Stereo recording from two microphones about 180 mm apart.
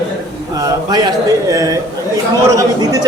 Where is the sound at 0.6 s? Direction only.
20° right (ahead or behind).